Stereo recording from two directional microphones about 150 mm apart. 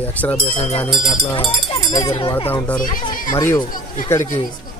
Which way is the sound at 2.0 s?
40° left (ahead or behind).